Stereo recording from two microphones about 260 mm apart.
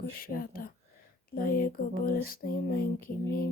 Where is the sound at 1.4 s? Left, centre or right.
Left.